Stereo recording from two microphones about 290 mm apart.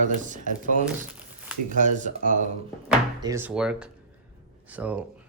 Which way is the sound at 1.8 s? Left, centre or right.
Right.